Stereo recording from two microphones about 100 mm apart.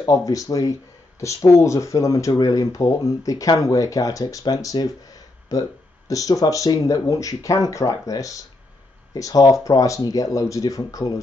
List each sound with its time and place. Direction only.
0.0 s speech: 35° left (ahead or behind)